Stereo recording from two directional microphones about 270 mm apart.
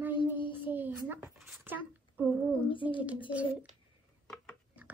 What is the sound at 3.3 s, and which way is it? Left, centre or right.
Speech, centre.